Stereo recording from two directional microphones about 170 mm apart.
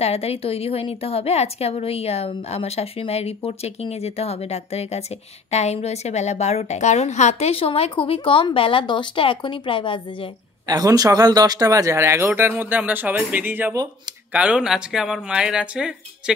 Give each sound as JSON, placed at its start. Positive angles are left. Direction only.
{"t": 0.0, "sound": "a woman's voice", "side_deg": 35}
{"t": 10.7, "sound": "speech", "side_deg": -20}